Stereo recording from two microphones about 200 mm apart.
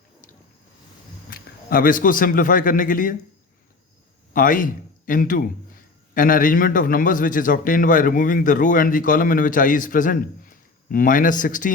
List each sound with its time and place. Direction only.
1.3 s a man's voice: 45° left (ahead or behind)
4.4 s a man's voice: 40° left (ahead or behind)